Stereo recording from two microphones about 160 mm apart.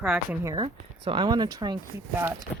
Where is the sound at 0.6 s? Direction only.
30° right (ahead or behind).